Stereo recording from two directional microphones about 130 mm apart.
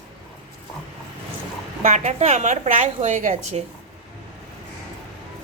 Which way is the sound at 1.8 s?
60° right (ahead or behind).